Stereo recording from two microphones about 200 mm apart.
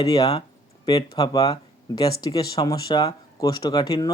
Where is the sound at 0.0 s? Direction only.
20° left (ahead or behind).